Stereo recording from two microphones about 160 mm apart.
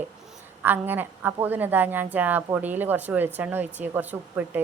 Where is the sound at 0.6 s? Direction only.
10° right (ahead or behind).